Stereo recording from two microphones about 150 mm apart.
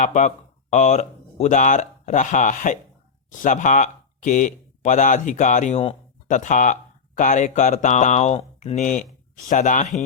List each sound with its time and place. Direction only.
0.0 s speech: 55° left (ahead or behind)
6.2 s speech: 60° left (ahead or behind)